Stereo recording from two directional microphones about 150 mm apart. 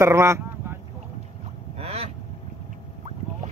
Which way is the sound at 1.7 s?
45° right (ahead or behind).